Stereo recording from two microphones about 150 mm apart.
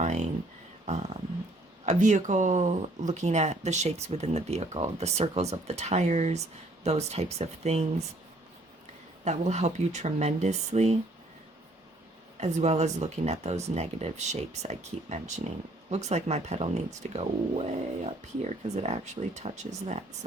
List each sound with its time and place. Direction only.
0.9 s a sound: 50° right (ahead or behind)
1.8 s speech: 55° right (ahead or behind)
9.2 s speech: 50° right (ahead or behind)
12.4 s speech: 50° right (ahead or behind)